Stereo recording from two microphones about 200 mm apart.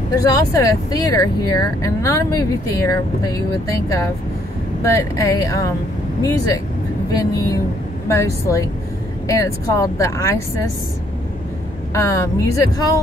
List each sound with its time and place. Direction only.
0.3 s speech: 15° left (ahead or behind)
11.9 s speech: 15° left (ahead or behind)